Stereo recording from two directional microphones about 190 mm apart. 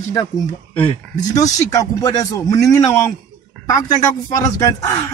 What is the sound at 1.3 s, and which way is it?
Speech, 20° left (ahead or behind).